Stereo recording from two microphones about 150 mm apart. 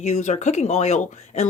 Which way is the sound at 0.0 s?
50° left (ahead or behind).